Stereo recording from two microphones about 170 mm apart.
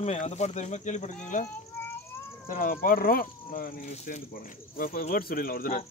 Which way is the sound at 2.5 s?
55° left (ahead or behind).